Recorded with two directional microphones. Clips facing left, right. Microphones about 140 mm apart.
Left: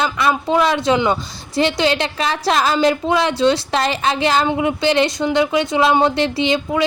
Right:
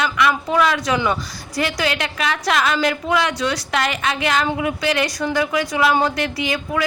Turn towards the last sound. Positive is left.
turn(degrees=25)  # may be behind; listen again after turning